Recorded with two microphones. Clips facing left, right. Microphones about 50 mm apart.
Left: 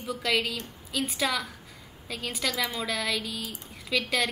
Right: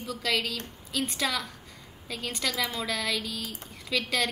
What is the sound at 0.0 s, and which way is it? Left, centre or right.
A woman's voice, centre.